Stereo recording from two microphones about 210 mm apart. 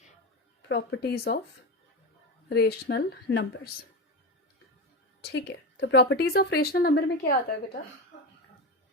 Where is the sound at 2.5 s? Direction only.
50° left (ahead or behind).